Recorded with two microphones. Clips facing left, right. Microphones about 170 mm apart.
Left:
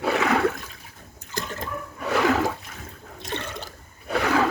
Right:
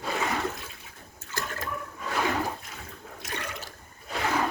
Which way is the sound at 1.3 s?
20° left (ahead or behind).